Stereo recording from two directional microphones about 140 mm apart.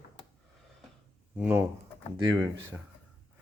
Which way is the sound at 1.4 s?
15° right (ahead or behind).